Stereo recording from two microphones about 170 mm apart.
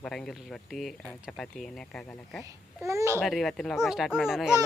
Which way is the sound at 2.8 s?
15° right (ahead or behind).